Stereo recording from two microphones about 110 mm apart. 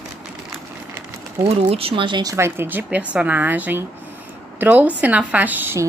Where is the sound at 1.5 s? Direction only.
60° right (ahead or behind).